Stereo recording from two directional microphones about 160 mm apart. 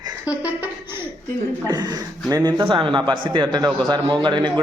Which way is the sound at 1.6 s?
25° right (ahead or behind).